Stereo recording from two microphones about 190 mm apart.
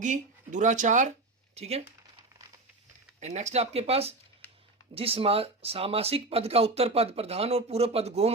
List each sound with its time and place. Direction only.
0.0 s speech: 40° right (ahead or behind)
3.2 s speech: 35° right (ahead or behind)